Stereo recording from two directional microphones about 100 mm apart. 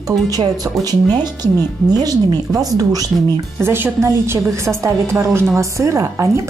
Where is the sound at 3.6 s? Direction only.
20° right (ahead or behind).